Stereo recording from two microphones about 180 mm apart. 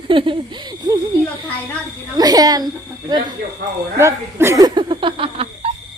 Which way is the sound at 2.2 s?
20° right (ahead or behind).